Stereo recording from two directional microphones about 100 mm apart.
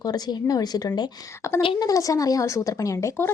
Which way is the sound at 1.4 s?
25° left (ahead or behind).